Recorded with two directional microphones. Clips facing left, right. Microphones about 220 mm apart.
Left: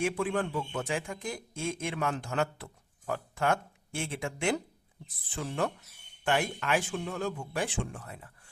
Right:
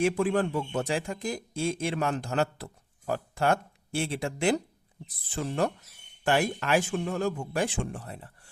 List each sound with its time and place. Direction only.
0.0 s speech: 40° right (ahead or behind)